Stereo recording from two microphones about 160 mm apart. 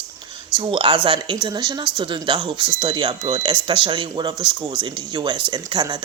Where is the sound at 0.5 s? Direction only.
30° right (ahead or behind).